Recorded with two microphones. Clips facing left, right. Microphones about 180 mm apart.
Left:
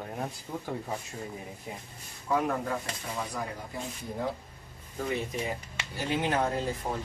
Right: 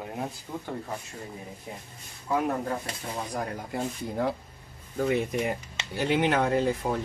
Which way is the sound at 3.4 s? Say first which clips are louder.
Right 5 dB; 70° right (ahead or behind).